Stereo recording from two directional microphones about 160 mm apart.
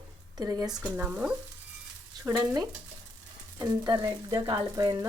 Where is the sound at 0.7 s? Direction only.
10° right (ahead or behind).